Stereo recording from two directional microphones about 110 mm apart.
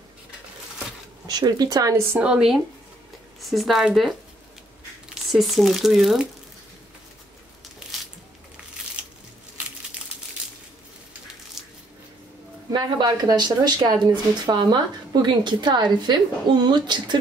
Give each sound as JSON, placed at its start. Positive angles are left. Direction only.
{"t": 1.2, "sound": "speech", "side_deg": -40}
{"t": 2.1, "sound": "a woman's voice", "side_deg": -10}
{"t": 5.3, "sound": "speech", "side_deg": 0}
{"t": 9.0, "sound": "a sound", "side_deg": -10}
{"t": 11.6, "sound": "squish", "side_deg": -5}
{"t": 12.7, "sound": "speech", "side_deg": -40}